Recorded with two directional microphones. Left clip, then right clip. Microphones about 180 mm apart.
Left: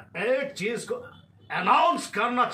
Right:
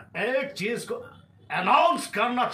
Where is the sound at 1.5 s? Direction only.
30° right (ahead or behind).